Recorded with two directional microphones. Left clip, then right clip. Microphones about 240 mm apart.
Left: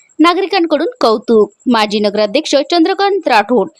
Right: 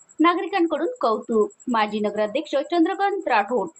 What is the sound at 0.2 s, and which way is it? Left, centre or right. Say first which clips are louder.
Speech: left 9 dB; left.